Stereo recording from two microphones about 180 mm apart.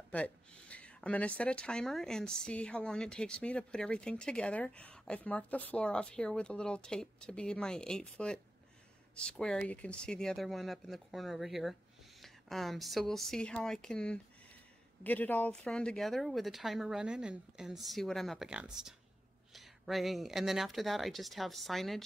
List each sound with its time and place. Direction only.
0.1 s speech: 5° left (ahead or behind)